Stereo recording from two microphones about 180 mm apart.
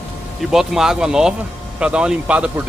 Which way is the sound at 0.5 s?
Centre (ahead or behind).